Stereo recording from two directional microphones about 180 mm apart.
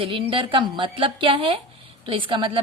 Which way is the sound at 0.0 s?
30° right (ahead or behind).